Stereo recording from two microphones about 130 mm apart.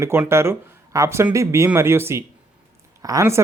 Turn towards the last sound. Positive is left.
turn(degrees=-25)  # may be behind; listen again after turning